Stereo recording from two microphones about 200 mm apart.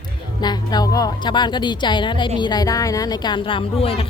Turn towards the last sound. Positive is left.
turn(degrees=30)  # may be behind; listen again after turning